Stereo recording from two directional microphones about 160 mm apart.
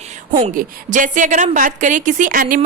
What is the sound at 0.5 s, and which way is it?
A woman's voice, 55° right (ahead or behind).